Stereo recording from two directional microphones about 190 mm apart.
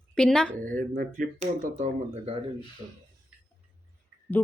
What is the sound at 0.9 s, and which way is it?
Speech, 40° right (ahead or behind).